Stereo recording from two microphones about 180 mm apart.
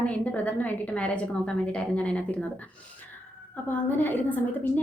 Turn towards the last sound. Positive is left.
turn(degrees=10)  # may be behind; listen again after turning